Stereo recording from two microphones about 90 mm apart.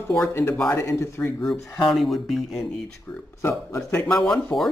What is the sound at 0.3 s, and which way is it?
A man's voice, 25° left (ahead or behind).